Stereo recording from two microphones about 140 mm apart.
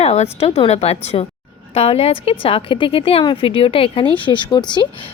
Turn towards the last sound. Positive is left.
turn(degrees=30)  # may be behind; listen again after turning